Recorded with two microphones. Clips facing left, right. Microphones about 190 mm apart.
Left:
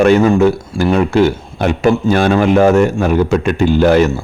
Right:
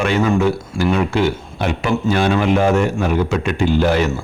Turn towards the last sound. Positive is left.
turn(degrees=45)  # may be behind; listen again after turning